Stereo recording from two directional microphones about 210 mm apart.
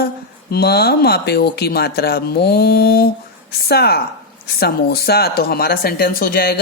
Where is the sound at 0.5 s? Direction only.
50° left (ahead or behind).